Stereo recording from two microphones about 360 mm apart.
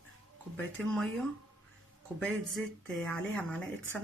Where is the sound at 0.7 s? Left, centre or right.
Centre.